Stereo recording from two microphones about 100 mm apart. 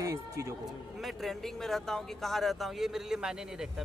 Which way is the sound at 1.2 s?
5° left (ahead or behind).